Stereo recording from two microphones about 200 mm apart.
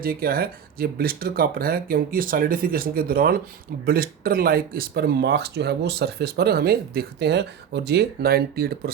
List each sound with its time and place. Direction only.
0.0 s speech: 45° right (ahead or behind)